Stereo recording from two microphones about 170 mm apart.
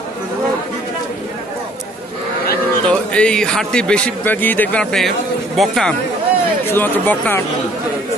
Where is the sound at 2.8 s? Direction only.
5° left (ahead or behind).